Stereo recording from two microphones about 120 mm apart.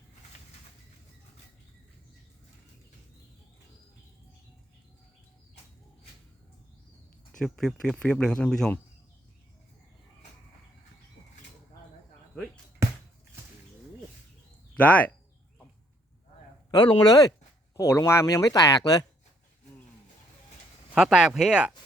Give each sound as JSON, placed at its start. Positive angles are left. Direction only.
{"t": 7.4, "sound": "speech", "side_deg": 5}
{"t": 14.8, "sound": "speech", "side_deg": 10}
{"t": 16.7, "sound": "speech", "side_deg": 30}
{"t": 20.9, "sound": "speech", "side_deg": -5}